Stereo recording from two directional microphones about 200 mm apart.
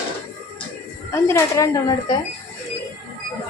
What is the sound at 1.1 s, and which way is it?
A woman's voice, 15° left (ahead or behind).